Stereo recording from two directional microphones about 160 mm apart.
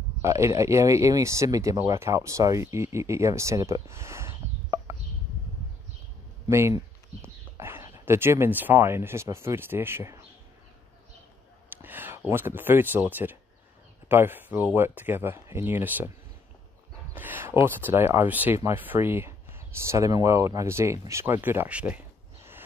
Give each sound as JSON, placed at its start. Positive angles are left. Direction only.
{"t": 0.2, "sound": "speech", "side_deg": -20}
{"t": 6.4, "sound": "speech", "side_deg": -20}
{"t": 11.7, "sound": "a sound", "side_deg": -10}
{"t": 12.3, "sound": "speech", "side_deg": -15}
{"t": 17.1, "sound": "speech", "side_deg": -10}